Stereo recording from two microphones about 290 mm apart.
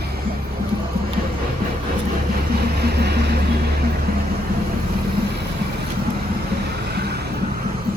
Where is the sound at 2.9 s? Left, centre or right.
Right.